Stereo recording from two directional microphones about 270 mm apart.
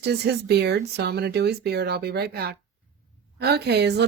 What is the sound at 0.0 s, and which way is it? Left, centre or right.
A woman's voice, right.